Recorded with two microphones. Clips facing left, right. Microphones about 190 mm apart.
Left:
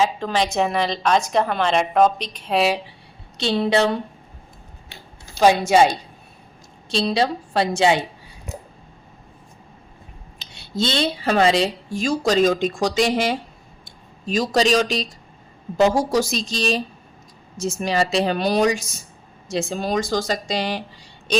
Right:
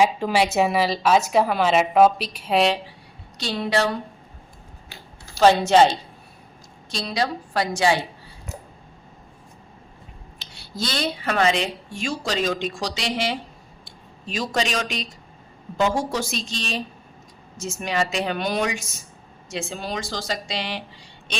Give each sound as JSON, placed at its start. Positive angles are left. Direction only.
{"t": 0.0, "sound": "a woman's voice", "side_deg": -10}
{"t": 3.3, "sound": "a woman's voice", "side_deg": 25}
{"t": 4.9, "sound": "a sound", "side_deg": 15}
{"t": 6.9, "sound": "a woman's voice", "side_deg": 25}
{"t": 10.4, "sound": "speech", "side_deg": 20}